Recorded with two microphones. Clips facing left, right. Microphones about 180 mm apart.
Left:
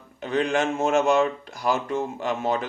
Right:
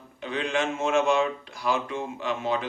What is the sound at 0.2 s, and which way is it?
Speech, 45° left (ahead or behind).